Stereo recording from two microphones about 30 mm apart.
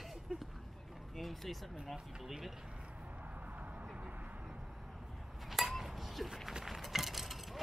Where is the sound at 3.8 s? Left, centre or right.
Right.